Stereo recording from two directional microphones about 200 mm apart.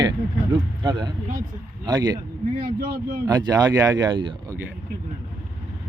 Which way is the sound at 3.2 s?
20° right (ahead or behind).